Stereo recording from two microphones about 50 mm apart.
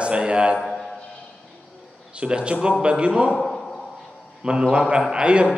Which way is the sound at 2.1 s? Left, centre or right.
Right.